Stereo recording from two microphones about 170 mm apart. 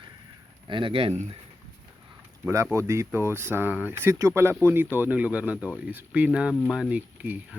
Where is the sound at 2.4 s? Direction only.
15° right (ahead or behind).